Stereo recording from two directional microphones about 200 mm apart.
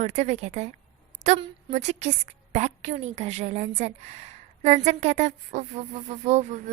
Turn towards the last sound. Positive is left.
turn(degrees=-35)  # may be behind; listen again after turning